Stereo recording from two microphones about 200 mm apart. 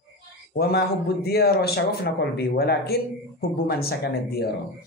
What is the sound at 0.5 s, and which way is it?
A man's voice, 50° left (ahead or behind).